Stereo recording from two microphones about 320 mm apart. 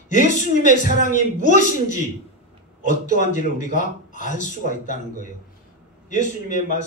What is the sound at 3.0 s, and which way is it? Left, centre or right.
A man's voice, left.